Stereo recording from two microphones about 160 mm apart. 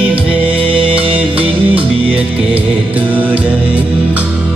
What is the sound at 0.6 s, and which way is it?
Music, 35° right (ahead or behind).